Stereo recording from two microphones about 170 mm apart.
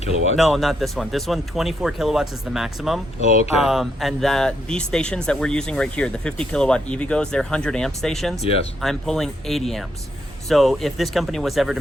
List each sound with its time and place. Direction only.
0.3 s speech: centre (ahead or behind)
8.4 s speech: 35° left (ahead or behind)
8.8 s speech: centre (ahead or behind)